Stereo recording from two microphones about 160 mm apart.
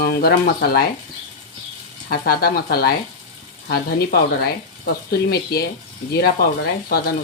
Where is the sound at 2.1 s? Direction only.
70° left (ahead or behind).